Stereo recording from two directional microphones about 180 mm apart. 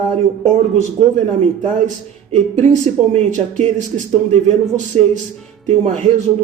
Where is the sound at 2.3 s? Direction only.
40° right (ahead or behind).